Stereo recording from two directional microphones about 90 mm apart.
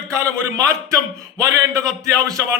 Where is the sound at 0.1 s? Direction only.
35° right (ahead or behind).